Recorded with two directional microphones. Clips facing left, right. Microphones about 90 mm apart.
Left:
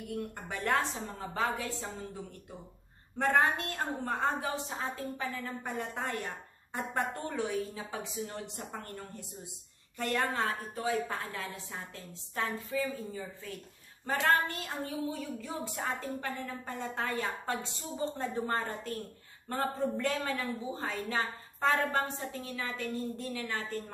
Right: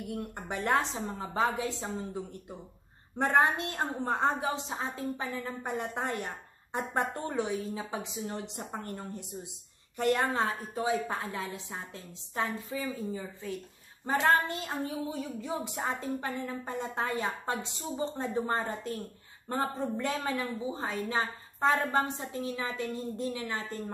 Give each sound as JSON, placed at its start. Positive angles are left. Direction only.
{"t": 0.1, "sound": "a woman's voice", "side_deg": -20}
{"t": 3.2, "sound": "a woman's voice", "side_deg": -20}